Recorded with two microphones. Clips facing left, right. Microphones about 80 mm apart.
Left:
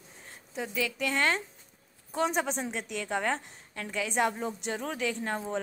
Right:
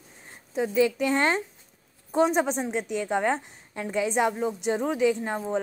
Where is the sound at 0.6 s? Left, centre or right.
Right.